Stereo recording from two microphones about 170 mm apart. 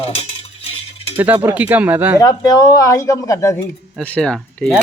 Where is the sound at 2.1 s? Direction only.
20° left (ahead or behind).